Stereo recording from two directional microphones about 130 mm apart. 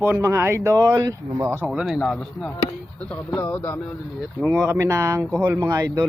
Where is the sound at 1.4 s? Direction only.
15° right (ahead or behind).